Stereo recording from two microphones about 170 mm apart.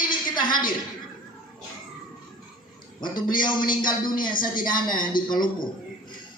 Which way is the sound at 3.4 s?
25° left (ahead or behind).